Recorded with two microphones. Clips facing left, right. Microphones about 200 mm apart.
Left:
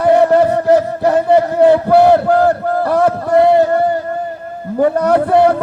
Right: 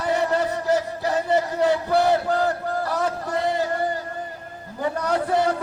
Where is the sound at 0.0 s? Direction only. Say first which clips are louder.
Left 12 dB; 55° left (ahead or behind).